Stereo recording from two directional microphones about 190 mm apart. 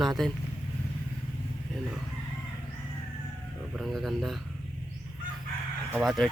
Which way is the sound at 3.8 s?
Centre (ahead or behind).